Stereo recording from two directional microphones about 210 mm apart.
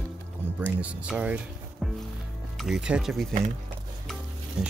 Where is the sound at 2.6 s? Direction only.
5° right (ahead or behind).